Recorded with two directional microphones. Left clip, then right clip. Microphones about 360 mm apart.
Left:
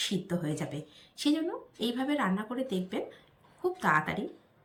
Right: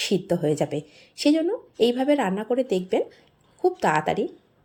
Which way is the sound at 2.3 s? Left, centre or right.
Right.